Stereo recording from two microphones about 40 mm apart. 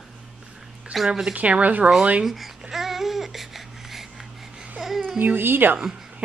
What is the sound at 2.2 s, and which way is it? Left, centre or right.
Babbling, centre.